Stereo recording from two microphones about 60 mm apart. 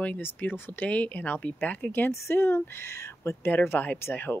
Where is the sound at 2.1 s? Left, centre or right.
Left.